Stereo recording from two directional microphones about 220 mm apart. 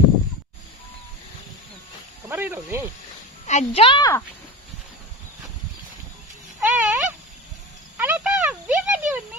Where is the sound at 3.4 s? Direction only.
30° left (ahead or behind).